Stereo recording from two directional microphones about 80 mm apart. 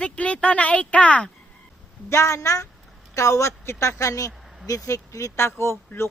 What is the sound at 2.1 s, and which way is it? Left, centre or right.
Speech, left.